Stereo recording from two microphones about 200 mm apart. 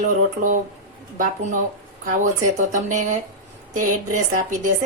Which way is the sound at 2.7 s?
40° right (ahead or behind).